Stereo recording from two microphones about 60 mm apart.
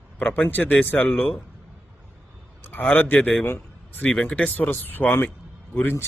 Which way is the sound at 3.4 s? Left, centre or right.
Left.